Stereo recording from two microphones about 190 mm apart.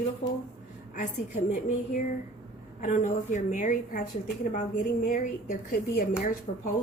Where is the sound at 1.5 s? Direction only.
45° left (ahead or behind).